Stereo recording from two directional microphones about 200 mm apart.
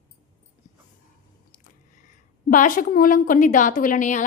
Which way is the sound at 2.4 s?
40° left (ahead or behind).